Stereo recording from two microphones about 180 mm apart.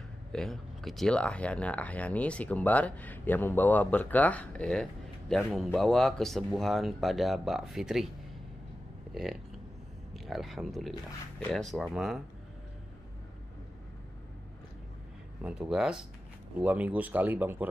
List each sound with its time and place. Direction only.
0.3 s speech: 5° left (ahead or behind)
9.1 s speech: centre (ahead or behind)
15.4 s speech: 5° right (ahead or behind)